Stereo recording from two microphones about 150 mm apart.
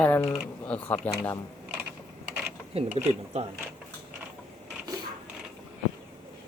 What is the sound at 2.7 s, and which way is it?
Speech, 45° right (ahead or behind).